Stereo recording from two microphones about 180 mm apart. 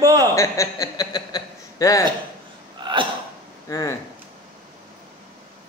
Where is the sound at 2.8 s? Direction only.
25° right (ahead or behind).